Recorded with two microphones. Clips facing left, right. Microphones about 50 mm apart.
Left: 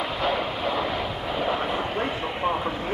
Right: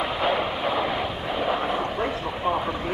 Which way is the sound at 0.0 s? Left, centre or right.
Centre.